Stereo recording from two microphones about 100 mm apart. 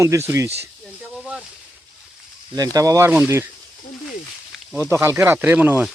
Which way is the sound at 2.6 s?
35° right (ahead or behind).